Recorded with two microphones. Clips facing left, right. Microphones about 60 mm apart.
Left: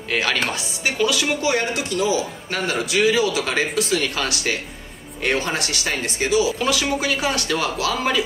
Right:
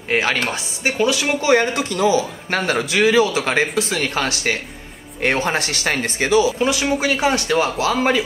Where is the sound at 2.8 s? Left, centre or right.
Right.